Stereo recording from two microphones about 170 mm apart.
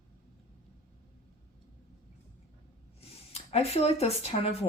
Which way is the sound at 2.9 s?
40° left (ahead or behind).